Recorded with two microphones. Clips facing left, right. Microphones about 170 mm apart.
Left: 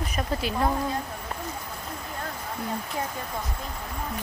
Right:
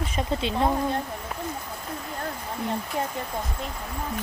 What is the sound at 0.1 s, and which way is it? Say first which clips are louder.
Speech: right 2 dB; 25° right (ahead or behind).